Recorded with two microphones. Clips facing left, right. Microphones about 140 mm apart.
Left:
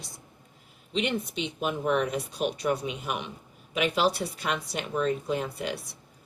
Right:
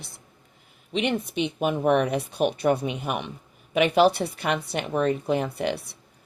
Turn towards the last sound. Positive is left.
turn(degrees=-60)  # may be behind; listen again after turning